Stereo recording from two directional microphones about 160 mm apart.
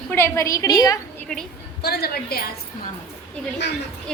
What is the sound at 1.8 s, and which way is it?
Speech, 85° left.